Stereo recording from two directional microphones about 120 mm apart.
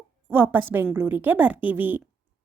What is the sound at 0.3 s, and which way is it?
Speech, 20° right (ahead or behind).